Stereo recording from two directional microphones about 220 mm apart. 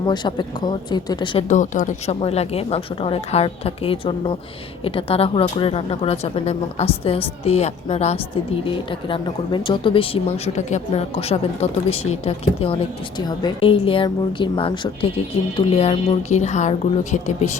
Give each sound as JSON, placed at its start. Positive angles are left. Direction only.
{"t": 0.0, "sound": "a woman's voice", "side_deg": 20}
{"t": 1.5, "sound": "a woman's voice", "side_deg": 35}